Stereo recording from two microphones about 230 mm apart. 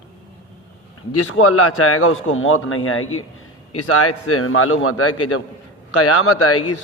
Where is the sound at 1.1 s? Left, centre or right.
Left.